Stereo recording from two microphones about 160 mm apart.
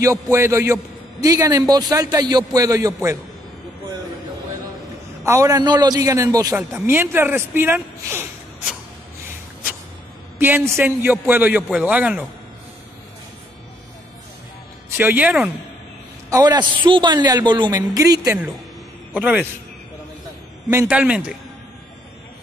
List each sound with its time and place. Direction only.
0.0 s a man's voice: 20° right (ahead or behind)
5.2 s a man's voice: 20° right (ahead or behind)
10.4 s a man's voice: 15° right (ahead or behind)
15.0 s a man's voice: 10° right (ahead or behind)
16.3 s a man's voice: 25° right (ahead or behind)
19.1 s a man's voice: 5° right (ahead or behind)
20.7 s a man's voice: 10° right (ahead or behind)